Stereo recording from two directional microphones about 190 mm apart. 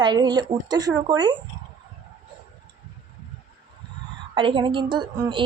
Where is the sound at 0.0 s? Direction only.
25° right (ahead or behind).